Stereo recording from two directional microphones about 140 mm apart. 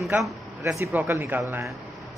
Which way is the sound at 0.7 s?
20° right (ahead or behind).